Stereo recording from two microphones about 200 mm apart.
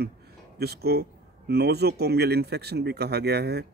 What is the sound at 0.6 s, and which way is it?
Speech, 55° right (ahead or behind).